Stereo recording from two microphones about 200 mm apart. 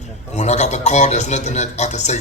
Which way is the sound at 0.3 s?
35° left (ahead or behind).